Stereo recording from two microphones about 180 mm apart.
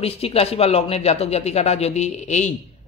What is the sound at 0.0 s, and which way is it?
Speech, 35° left (ahead or behind).